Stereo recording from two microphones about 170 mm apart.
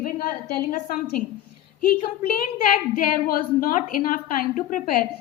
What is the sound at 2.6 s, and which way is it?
A woman's voice, 60° left (ahead or behind).